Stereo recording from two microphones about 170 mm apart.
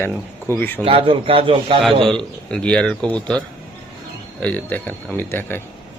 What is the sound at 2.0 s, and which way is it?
Speech, 5° left (ahead or behind).